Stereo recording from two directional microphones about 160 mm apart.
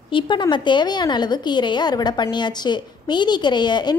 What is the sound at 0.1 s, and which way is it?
A woman's voice, 30° left (ahead or behind).